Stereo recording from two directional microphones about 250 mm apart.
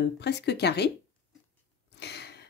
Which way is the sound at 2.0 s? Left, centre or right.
Left.